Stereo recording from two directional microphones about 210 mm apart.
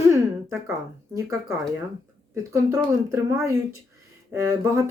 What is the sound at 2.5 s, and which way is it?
Speech, 15° right (ahead or behind).